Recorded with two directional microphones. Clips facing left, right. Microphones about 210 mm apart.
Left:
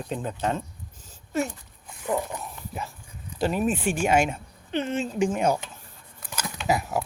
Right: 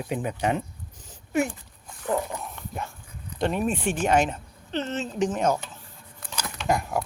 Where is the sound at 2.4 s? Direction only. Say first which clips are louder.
Right 1 dB; centre (ahead or behind).